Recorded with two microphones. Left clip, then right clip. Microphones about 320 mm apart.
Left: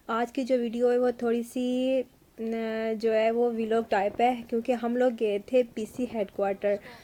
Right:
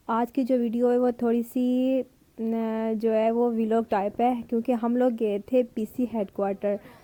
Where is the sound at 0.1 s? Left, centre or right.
Right.